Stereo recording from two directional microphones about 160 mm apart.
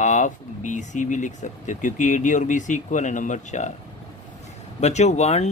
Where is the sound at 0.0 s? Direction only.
50° left (ahead or behind).